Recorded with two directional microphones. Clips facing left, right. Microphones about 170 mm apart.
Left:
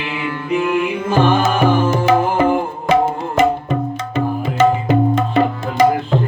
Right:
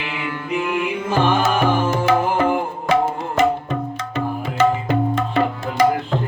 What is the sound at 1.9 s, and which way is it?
Tabla, 20° left (ahead or behind).